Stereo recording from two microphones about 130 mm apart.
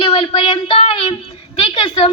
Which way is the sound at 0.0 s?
45° left (ahead or behind).